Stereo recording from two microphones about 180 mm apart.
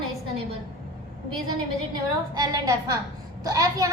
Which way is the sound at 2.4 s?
20° right (ahead or behind).